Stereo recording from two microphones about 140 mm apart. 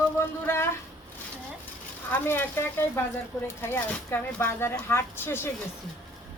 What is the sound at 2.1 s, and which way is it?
Speech, 15° left (ahead or behind).